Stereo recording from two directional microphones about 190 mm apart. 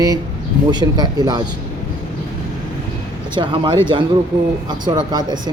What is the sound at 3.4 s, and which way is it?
Speech, 25° right (ahead or behind).